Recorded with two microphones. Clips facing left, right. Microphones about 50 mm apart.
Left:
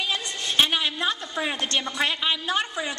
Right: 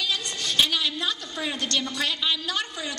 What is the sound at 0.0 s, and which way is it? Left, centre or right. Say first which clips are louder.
A woman's voice: left 1 dB; left.